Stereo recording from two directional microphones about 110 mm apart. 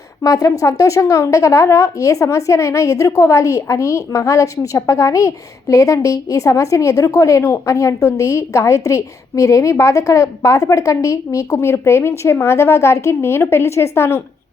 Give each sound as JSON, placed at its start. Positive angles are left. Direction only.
{"t": 0.2, "sound": "speech", "side_deg": 30}